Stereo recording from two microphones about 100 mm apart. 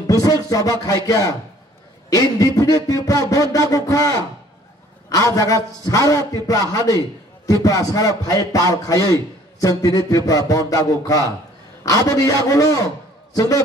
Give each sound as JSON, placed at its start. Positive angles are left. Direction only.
{"t": 0.0, "sound": "a man's voice", "side_deg": 35}